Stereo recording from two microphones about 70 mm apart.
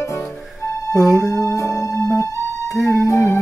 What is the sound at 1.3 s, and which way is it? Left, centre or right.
Music, left.